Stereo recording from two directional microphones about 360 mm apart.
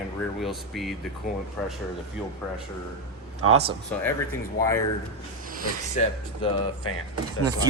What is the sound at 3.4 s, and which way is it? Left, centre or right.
Speech, right.